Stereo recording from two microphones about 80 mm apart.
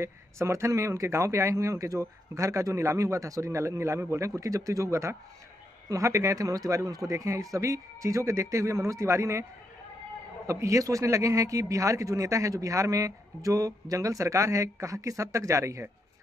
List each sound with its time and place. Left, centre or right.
0.0 s a man's voice: right